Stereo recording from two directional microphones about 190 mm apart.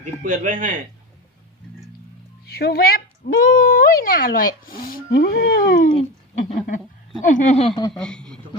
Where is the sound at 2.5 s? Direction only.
55° left (ahead or behind).